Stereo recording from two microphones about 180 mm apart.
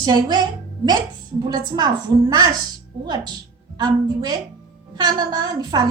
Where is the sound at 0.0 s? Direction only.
20° right (ahead or behind).